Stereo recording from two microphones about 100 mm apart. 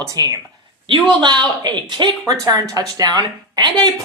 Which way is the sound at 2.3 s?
40° right (ahead or behind).